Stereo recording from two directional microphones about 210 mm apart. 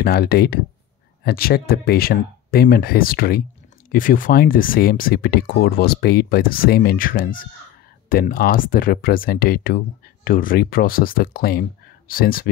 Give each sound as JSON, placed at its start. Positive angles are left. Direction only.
{"t": 0.0, "sound": "speech", "side_deg": 50}